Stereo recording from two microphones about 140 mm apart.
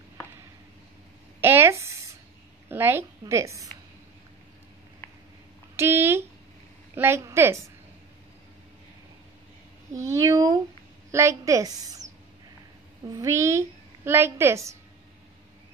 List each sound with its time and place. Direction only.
1.4 s a sound: 15° right (ahead or behind)
2.7 s a woman's voice: 15° right (ahead or behind)
5.8 s a woman's voice: 15° right (ahead or behind)
9.9 s a woman's voice: 20° right (ahead or behind)
13.1 s a woman's voice: 20° right (ahead or behind)